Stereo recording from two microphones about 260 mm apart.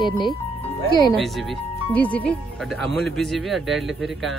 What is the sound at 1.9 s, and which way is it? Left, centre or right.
A man's voice, centre.